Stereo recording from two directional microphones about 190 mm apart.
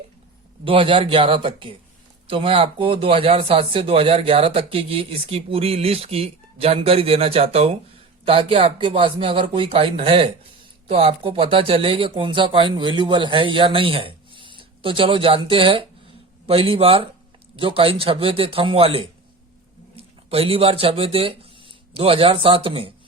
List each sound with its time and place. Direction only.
0.6 s speech: 30° right (ahead or behind)